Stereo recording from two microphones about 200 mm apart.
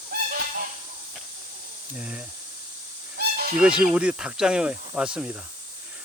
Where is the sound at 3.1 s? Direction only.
50° right (ahead or behind).